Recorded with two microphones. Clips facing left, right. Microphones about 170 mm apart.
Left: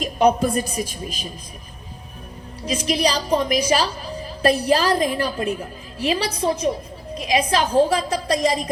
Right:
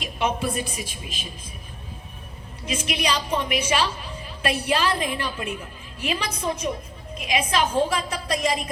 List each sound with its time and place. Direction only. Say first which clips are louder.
0.0 s a woman's voice: left 8 dB; 40° left (ahead or behind)
2.6 s a woman's voice: left 5 dB; 35° left (ahead or behind)